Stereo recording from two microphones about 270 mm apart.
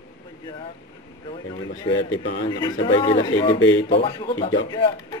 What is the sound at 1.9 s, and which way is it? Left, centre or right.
Speech, left.